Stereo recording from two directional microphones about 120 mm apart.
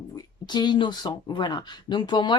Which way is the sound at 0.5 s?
40° left (ahead or behind).